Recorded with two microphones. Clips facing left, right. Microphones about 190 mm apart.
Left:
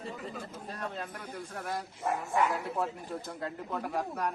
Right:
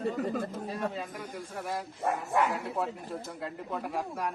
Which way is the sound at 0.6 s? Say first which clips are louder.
Right 4 dB; 5° right (ahead or behind).